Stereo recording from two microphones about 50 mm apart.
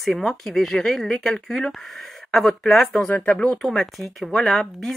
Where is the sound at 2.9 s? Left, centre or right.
Left.